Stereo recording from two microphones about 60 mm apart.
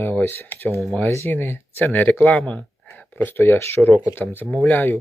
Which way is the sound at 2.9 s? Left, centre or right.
Left.